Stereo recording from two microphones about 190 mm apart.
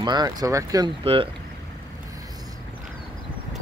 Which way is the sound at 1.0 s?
30° right (ahead or behind).